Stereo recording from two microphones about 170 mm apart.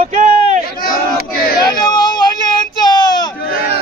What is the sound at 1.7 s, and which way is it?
Speech, 25° left (ahead or behind).